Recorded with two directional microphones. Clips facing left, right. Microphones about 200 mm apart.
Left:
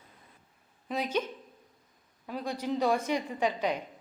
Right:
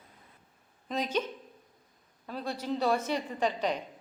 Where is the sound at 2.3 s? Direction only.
15° left (ahead or behind).